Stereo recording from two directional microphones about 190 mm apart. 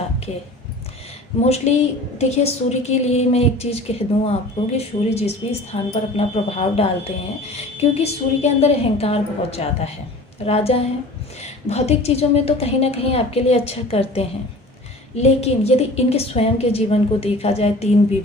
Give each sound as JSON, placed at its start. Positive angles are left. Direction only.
{"t": 1.5, "sound": "a woman's voice", "side_deg": 35}